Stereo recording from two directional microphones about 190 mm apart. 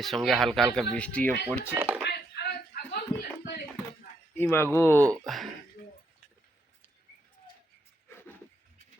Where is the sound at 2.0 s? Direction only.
55° left (ahead or behind).